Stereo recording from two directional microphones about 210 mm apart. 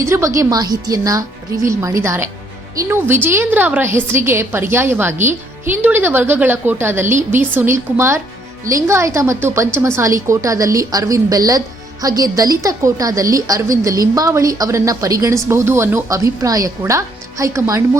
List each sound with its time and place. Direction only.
0.0 s a woman's voice: 15° right (ahead or behind)